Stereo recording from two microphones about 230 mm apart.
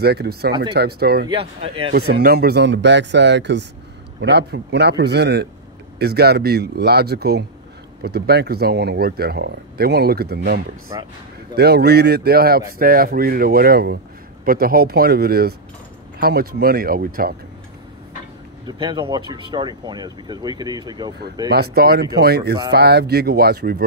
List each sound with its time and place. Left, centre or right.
0.0 s speech: right
1.3 s speech: right
1.9 s speech: right
10.9 s speech: centre
11.5 s speech: right
18.7 s speech: centre
21.5 s speech: right